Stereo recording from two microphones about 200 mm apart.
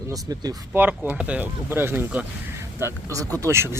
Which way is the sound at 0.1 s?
20° right (ahead or behind).